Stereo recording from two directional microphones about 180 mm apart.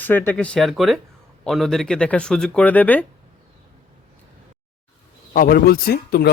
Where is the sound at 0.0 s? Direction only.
10° left (ahead or behind).